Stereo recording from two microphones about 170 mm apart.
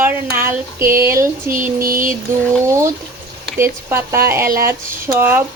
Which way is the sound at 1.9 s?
55° right (ahead or behind).